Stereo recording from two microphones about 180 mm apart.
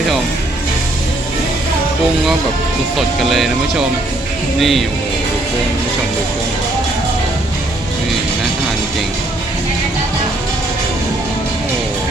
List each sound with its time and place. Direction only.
3.2 s speech: centre (ahead or behind)